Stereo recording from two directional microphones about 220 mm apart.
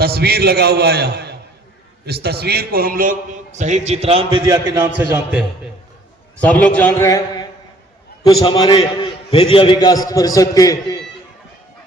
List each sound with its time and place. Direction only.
0.0 s a man's voice: 45° right (ahead or behind); by 5.5 s 5° right (ahead or behind)
6.4 s a man's voice: 5° left (ahead or behind)